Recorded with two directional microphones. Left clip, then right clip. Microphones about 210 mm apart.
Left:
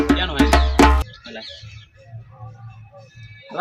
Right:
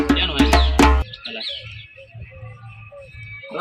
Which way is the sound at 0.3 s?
Centre (ahead or behind).